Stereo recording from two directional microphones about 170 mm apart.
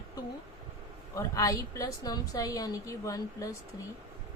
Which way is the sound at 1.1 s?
20° left (ahead or behind).